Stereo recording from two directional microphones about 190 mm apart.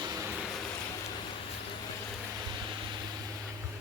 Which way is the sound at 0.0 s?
20° right (ahead or behind).